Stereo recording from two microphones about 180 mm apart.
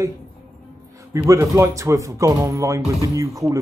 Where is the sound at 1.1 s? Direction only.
15° right (ahead or behind).